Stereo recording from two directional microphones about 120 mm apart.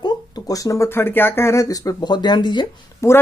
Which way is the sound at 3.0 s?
25° left (ahead or behind).